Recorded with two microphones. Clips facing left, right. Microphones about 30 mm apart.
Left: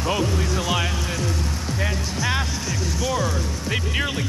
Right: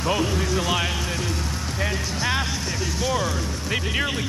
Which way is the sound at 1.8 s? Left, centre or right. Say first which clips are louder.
Right 1 dB; centre.